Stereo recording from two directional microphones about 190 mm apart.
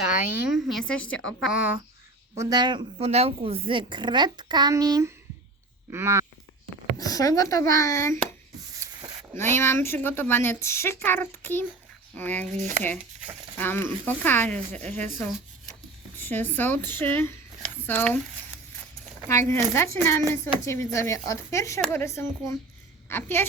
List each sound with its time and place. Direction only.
0.4 s speech: centre (ahead or behind)
2.3 s a woman's voice: 20° right (ahead or behind)
7.0 s a woman's voice: 20° left (ahead or behind)
9.3 s a woman's voice: 10° left (ahead or behind)
12.5 s speech: 40° right (ahead or behind)
13.6 s a woman's voice: 10° left (ahead or behind)
19.3 s a woman's voice: 15° left (ahead or behind)